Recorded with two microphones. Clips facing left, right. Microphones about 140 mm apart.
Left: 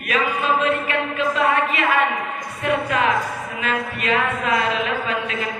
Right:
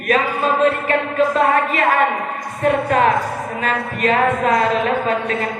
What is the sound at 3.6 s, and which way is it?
Speech, 40° right (ahead or behind).